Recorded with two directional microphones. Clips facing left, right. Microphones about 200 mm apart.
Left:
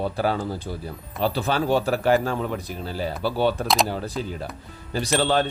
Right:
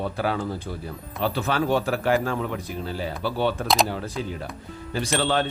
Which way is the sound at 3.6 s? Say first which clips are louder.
Even; centre (ahead or behind).